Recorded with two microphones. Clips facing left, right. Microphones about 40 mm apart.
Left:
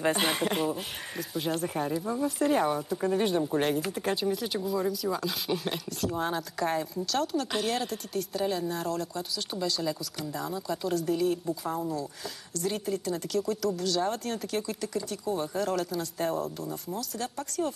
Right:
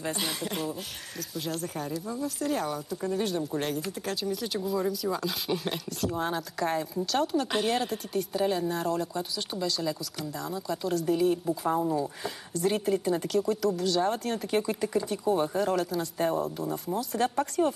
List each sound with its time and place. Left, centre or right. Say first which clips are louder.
0.0 s speech: left 6 dB; left
1.3 s speech: left 3 dB; centre
4.4 s speech: even; centre
11.7 s speech: right 5 dB; right
12.5 s speech: right 4 dB; centre
14.5 s speech: right 7 dB; right
15.5 s speech: right 2 dB; centre
17.1 s speech: right 8 dB; right